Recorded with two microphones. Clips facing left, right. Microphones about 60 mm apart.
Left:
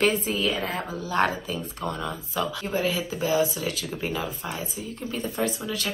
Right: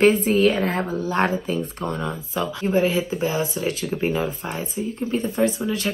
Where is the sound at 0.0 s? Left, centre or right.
Right.